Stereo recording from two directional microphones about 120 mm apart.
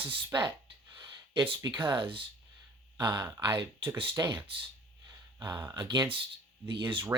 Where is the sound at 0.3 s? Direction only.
40° right (ahead or behind).